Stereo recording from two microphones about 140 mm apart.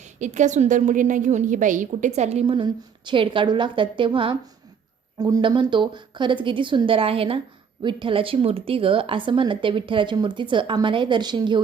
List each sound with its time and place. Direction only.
0.2 s a woman's voice: 60° right (ahead or behind)
2.6 s a woman's voice: 35° right (ahead or behind)